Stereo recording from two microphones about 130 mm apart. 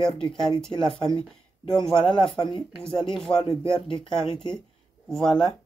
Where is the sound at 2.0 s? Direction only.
40° left (ahead or behind).